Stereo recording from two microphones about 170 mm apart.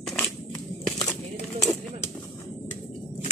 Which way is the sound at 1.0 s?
5° left (ahead or behind).